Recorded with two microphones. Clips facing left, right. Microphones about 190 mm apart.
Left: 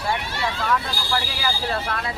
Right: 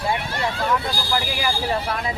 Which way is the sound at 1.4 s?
15° right (ahead or behind).